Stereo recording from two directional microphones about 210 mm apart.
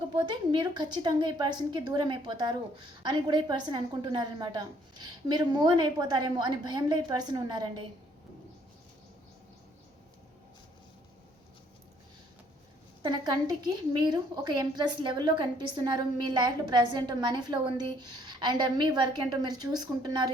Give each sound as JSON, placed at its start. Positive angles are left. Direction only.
{"t": 0.1, "sound": "a woman's voice", "side_deg": -20}
{"t": 13.0, "sound": "a woman's voice", "side_deg": -20}